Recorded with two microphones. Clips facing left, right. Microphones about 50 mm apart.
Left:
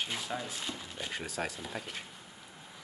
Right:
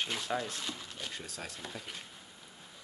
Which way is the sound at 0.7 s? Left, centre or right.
Left.